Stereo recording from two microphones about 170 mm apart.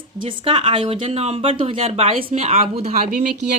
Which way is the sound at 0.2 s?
30° right (ahead or behind).